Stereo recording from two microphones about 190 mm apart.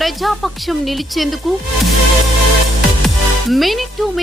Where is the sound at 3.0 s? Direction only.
Centre (ahead or behind).